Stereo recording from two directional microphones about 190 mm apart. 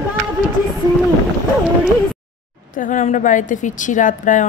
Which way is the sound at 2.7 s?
40° left (ahead or behind).